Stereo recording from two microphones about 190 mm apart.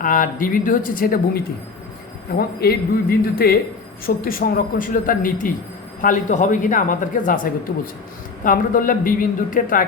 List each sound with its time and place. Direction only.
0.0 s speech: 45° left (ahead or behind)
8.4 s speech: 45° left (ahead or behind)